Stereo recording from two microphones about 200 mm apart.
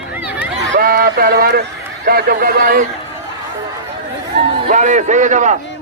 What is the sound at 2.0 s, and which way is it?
Speech, 50° right (ahead or behind).